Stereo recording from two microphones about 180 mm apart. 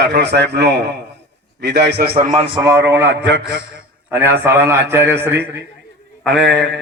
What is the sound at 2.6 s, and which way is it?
A man's voice, 15° right (ahead or behind).